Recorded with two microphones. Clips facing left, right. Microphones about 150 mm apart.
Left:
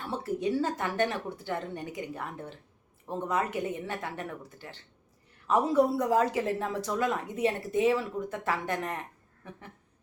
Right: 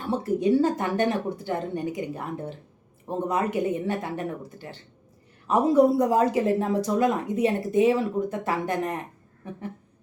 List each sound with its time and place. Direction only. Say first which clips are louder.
0.3 s speech: right 7 dB; 15° right (ahead or behind)